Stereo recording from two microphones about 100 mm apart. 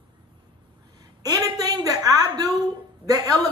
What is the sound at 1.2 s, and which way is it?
A woman's voice, 40° right (ahead or behind).